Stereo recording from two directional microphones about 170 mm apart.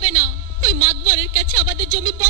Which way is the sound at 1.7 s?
15° right (ahead or behind).